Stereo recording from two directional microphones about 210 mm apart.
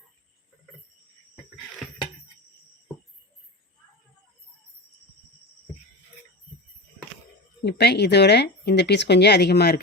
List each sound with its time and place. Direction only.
7.6 s speech: 50° left (ahead or behind)